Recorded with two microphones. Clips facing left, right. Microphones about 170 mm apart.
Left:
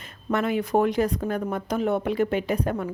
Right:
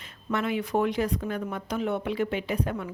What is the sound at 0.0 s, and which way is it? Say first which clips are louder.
Speech: left 4 dB; 45° left (ahead or behind).